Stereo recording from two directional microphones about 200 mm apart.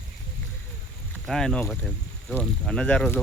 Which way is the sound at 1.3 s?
5° left (ahead or behind).